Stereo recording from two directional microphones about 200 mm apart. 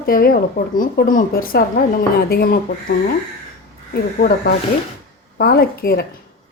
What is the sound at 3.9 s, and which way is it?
Speech, 45° left (ahead or behind).